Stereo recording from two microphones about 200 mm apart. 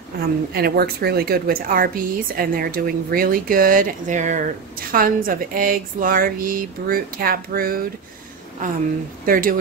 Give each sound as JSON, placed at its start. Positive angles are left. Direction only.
{"t": 0.2, "sound": "a woman's voice", "side_deg": -50}
{"t": 9.2, "sound": "a woman's voice", "side_deg": -45}